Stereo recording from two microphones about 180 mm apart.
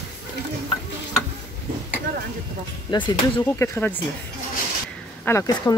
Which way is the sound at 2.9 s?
25° left (ahead or behind).